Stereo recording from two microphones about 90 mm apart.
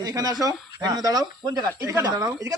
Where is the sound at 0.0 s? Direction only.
45° right (ahead or behind).